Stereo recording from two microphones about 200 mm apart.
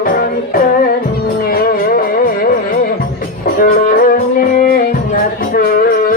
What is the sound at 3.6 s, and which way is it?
Music, 45° left (ahead or behind).